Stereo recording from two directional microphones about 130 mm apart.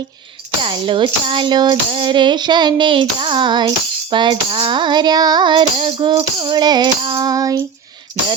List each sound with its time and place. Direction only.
0.6 s child singing: 40° right (ahead or behind)